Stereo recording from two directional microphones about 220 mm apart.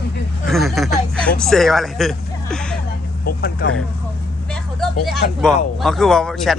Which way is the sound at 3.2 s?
45° left (ahead or behind).